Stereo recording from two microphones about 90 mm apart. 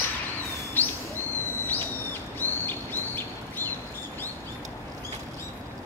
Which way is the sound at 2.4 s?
25° left (ahead or behind).